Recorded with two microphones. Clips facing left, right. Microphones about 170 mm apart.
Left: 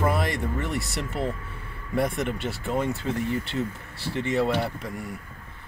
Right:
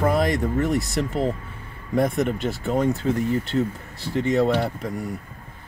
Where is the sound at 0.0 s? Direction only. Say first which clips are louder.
Right 5 dB; 40° right (ahead or behind).